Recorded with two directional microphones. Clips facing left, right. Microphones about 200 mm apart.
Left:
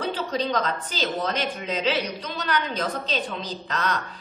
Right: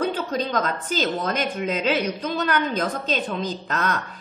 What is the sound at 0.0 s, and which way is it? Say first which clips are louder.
A woman's voice: right 2 dB; 50° right (ahead or behind).